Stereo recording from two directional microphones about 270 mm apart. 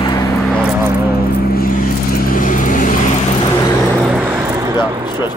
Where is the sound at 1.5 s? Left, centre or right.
Left.